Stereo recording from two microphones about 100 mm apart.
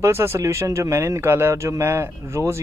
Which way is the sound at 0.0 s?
25° right (ahead or behind).